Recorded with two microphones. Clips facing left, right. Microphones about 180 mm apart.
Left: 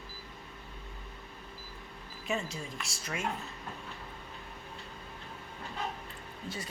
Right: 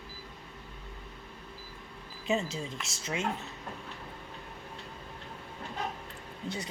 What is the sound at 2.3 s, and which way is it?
Speech, 25° right (ahead or behind).